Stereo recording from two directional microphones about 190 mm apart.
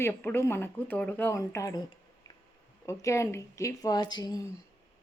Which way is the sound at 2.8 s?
15° left (ahead or behind).